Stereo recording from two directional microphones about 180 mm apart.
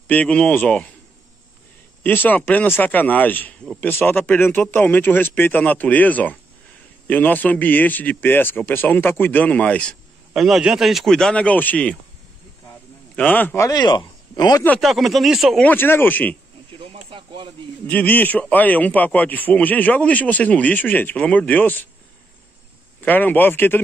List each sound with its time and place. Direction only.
0.1 s a man's voice: 5° left (ahead or behind)
2.0 s a man's voice: 10° left (ahead or behind)
13.1 s a man's voice: 10° left (ahead or behind)
14.8 s speech: centre (ahead or behind)
16.7 s speech: 30° right (ahead or behind)
17.8 s a man's voice: 10° left (ahead or behind)
22.9 s a man's voice: 10° left (ahead or behind)